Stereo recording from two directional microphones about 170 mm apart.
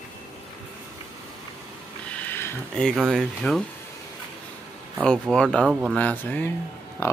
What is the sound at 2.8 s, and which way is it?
Speech, centre (ahead or behind).